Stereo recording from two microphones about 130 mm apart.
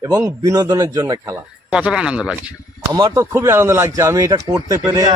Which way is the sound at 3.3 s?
20° right (ahead or behind).